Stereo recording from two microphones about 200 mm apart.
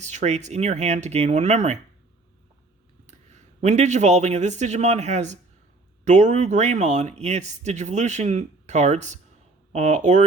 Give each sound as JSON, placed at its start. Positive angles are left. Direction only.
{"t": 0.0, "sound": "speech", "side_deg": -35}
{"t": 3.1, "sound": "speech", "side_deg": -35}